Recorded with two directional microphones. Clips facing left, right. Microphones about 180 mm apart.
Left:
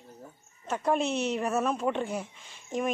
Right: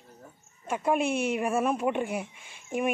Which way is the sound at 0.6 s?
10° right (ahead or behind).